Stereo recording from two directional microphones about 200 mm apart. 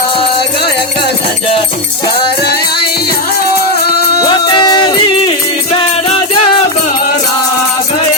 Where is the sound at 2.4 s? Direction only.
55° left (ahead or behind).